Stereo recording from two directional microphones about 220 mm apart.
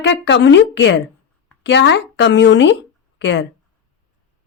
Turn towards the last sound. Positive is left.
turn(degrees=55)  # may be behind; listen again after turning